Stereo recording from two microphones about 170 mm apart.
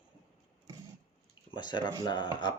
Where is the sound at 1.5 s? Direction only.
25° left (ahead or behind).